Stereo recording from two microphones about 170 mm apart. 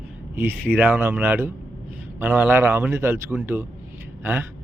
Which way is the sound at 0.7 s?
10° right (ahead or behind).